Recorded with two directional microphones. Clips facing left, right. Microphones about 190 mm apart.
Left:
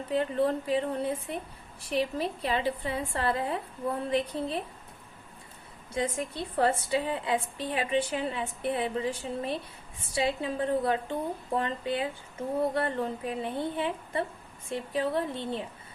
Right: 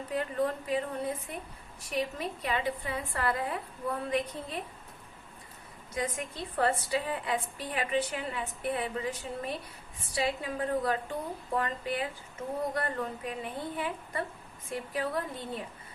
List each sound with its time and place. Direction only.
0.1 s a woman's voice: 30° left (ahead or behind)
5.9 s a woman's voice: 30° left (ahead or behind)